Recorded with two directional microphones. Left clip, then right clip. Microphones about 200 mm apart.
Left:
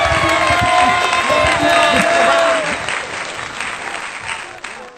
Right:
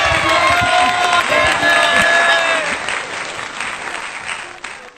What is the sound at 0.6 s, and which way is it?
Applause, centre (ahead or behind).